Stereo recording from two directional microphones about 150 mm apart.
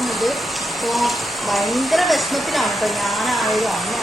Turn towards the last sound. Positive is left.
turn(degrees=0)  # may be behind; listen again after turning